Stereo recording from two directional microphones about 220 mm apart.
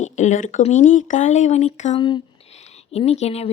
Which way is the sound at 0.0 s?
35° left (ahead or behind).